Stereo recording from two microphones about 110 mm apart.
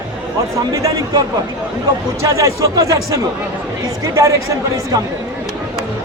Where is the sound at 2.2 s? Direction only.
30° right (ahead or behind).